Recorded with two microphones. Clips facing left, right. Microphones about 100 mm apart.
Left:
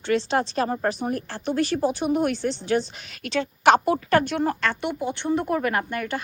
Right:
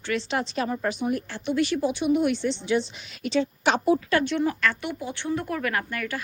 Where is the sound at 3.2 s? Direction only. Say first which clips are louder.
Even; 65° left (ahead or behind).